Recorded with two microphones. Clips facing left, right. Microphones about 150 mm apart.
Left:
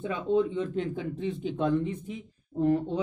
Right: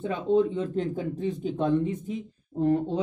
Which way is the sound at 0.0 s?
30° right (ahead or behind).